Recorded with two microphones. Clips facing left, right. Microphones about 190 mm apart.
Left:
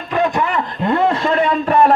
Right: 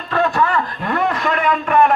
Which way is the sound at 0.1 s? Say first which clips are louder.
Even; 15° left (ahead or behind).